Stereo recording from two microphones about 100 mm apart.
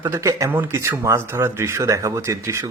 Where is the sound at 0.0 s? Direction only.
30° right (ahead or behind).